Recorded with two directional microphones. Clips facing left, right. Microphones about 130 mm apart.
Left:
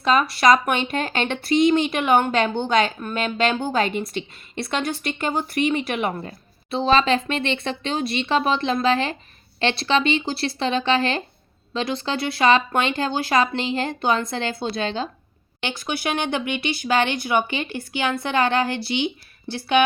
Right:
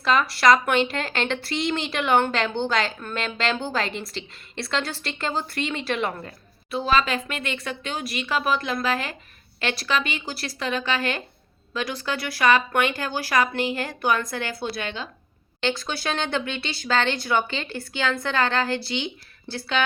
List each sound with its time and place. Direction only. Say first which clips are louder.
0.0 s a woman's voice: left 2 dB; 20° left (ahead or behind)
15.6 s speech: even; 15° left (ahead or behind)